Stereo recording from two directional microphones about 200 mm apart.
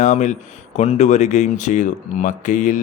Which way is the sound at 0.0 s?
35° left (ahead or behind).